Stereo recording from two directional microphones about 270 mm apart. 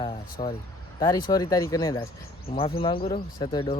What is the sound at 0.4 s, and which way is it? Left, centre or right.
Speech, left.